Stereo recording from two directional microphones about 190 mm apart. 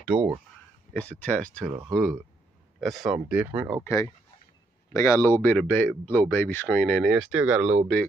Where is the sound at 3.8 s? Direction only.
15° left (ahead or behind); by 7.8 s 5° right (ahead or behind).